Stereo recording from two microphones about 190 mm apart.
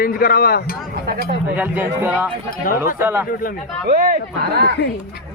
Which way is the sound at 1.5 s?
10° right (ahead or behind).